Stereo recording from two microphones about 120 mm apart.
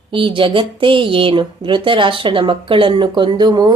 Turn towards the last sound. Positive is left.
turn(degrees=-35)  # may be behind; listen again after turning